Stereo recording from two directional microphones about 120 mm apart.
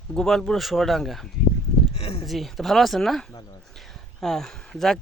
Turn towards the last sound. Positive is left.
turn(degrees=5)  # may be behind; listen again after turning